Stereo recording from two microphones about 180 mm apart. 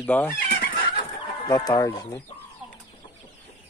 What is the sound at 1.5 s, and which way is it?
Speech, 20° left (ahead or behind).